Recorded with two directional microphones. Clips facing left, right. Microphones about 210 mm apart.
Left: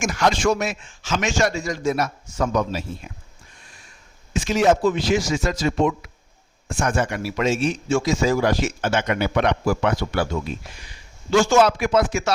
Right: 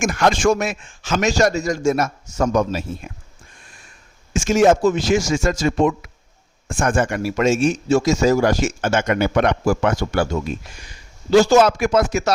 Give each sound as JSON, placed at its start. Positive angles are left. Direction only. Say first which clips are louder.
{"t": 0.0, "sound": "a man's voice", "louder": "right 3 dB", "side_deg": -50}
{"t": 4.4, "sound": "a man's voice", "louder": "right 4 dB", "side_deg": -45}